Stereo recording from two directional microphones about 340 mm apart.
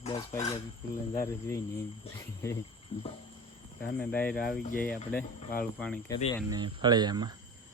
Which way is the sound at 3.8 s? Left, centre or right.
Left.